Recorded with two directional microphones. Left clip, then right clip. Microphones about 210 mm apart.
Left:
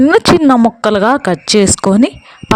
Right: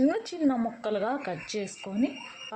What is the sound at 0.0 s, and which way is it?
A woman's voice, 50° left (ahead or behind).